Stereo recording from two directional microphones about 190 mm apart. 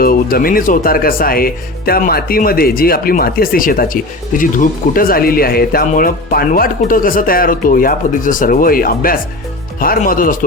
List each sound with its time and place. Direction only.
0.0 s speech: 50° left (ahead or behind)